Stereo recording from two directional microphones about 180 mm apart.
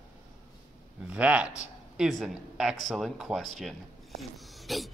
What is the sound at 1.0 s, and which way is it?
Speech, 5° right (ahead or behind).